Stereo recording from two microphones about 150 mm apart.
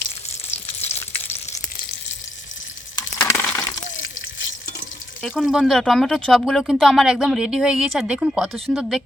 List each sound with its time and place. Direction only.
0.8 s frying: 45° left (ahead or behind)
3.2 s crushing: 15° left (ahead or behind)
5.2 s speech: centre (ahead or behind)